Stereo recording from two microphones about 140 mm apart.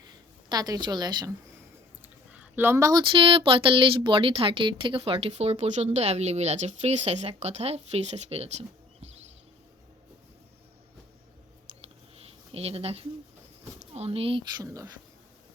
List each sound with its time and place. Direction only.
0.4 s a woman's voice: 25° right (ahead or behind)
2.3 s speech: 15° right (ahead or behind)
3.0 s speech: 40° right (ahead or behind)
12.2 s a sound: 45° right (ahead or behind)
13.7 s speech: 50° right (ahead or behind)
14.6 s a woman's voice: 25° right (ahead or behind)